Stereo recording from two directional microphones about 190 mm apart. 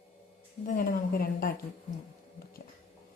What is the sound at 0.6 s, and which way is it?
Speech, 45° left (ahead or behind).